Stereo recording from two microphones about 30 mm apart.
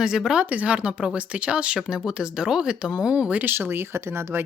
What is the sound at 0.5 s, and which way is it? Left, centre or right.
Speech, right.